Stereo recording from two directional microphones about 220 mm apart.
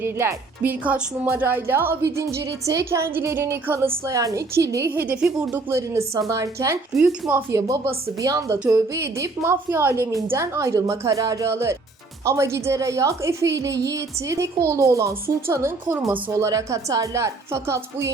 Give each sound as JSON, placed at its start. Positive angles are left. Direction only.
{"t": 0.0, "sound": "speech", "side_deg": -10}